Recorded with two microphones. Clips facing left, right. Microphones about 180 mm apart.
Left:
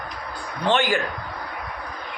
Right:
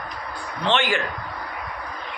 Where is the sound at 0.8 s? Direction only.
40° left (ahead or behind).